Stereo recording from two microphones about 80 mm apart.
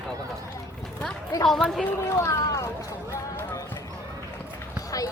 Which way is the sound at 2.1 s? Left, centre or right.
Left.